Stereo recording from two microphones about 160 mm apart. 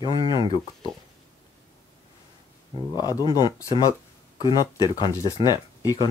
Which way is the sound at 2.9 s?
25° left (ahead or behind).